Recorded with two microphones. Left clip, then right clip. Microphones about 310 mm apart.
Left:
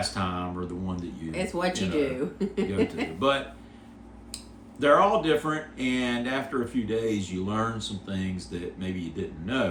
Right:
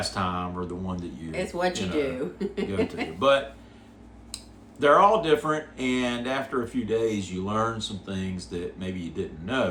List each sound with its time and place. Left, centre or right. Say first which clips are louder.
0.1 s speech: right 2 dB; centre
1.3 s speech: right 1 dB; centre
3.2 s speech: right 4 dB; centre
4.8 s speech: right 2 dB; centre